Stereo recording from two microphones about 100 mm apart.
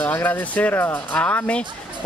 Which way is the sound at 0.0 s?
20° left (ahead or behind).